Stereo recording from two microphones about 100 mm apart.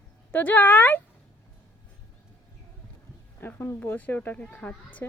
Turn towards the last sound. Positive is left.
turn(degrees=15)  # may be behind; listen again after turning